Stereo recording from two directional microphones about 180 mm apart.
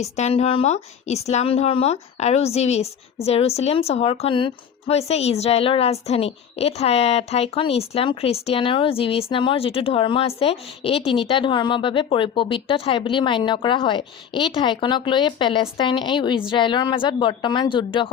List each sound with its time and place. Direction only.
0.0 s a woman's voice: 35° left (ahead or behind)